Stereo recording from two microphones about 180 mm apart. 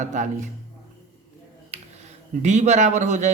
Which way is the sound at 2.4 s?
40° right (ahead or behind).